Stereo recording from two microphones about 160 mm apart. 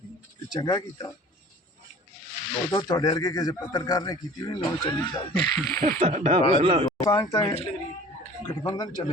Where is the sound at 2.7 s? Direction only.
25° left (ahead or behind).